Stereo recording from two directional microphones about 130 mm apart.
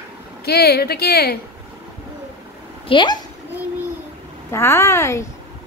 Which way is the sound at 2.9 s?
35° left (ahead or behind).